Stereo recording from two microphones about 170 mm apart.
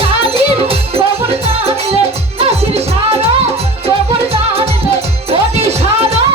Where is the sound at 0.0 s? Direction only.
35° right (ahead or behind).